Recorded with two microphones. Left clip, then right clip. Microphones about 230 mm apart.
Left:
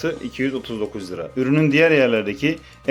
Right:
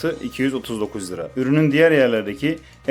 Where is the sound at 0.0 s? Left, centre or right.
Centre.